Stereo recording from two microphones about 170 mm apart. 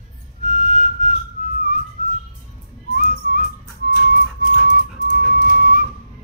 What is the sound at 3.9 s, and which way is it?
Music, 55° left (ahead or behind).